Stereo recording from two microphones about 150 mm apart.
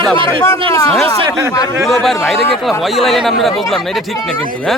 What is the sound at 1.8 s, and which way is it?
Speech, centre (ahead or behind).